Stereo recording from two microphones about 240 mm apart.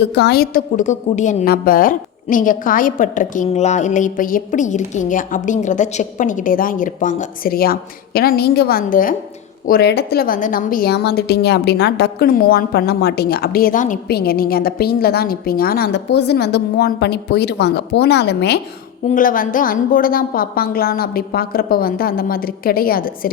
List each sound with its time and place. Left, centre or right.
0.0 s a woman's voice: left
19.0 s a woman's voice: left